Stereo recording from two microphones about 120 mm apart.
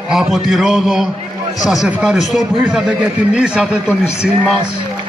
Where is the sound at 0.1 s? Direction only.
5° right (ahead or behind).